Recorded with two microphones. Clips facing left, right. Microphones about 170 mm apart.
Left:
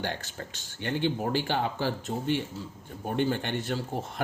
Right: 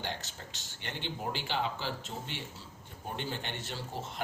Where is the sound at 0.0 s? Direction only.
55° left (ahead or behind).